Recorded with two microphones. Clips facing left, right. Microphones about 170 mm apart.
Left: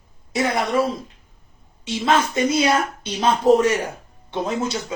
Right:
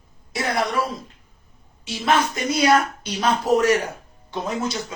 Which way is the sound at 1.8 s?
25° left (ahead or behind).